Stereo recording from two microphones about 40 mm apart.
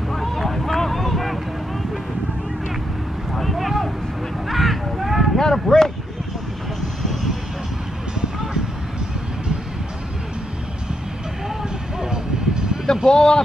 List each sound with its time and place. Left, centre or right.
0.1 s boat: centre
3.3 s vehicle: centre
4.5 s a sound: centre
5.4 s a sound: centre
12.0 s music: centre
12.8 s speech: centre